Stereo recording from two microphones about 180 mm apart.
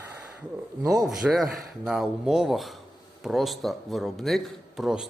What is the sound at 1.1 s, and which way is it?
A man's voice, centre (ahead or behind).